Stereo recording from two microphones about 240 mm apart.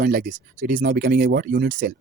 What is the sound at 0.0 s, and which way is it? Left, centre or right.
Speech, right.